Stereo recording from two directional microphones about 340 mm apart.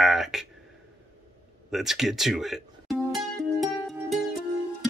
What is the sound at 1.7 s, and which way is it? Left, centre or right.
Speech, centre.